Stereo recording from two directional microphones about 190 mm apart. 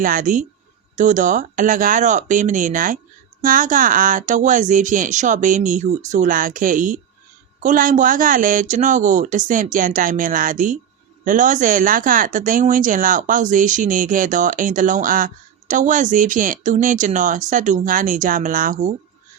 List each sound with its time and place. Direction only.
0.0 s speech: 45° right (ahead or behind)